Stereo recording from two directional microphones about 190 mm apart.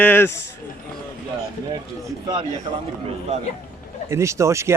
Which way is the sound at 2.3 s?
20° right (ahead or behind).